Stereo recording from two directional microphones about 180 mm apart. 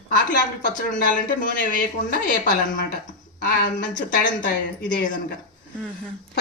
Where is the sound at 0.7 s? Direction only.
50° left (ahead or behind).